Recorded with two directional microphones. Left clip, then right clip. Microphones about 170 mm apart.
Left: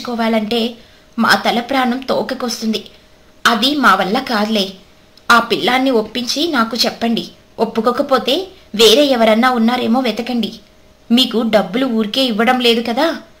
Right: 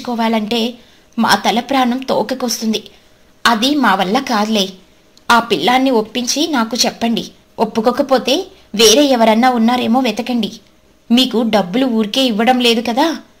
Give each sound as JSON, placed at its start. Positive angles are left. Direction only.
{"t": 0.0, "sound": "a woman's voice", "side_deg": -40}